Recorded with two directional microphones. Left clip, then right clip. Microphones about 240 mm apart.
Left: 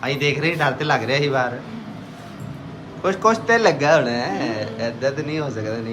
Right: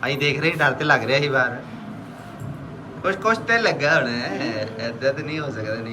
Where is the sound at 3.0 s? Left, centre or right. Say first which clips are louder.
Left 3 dB; centre.